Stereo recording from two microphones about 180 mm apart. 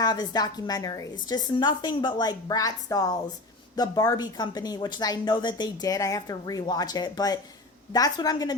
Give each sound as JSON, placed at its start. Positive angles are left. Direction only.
{"t": 0.0, "sound": "a woman's voice", "side_deg": 20}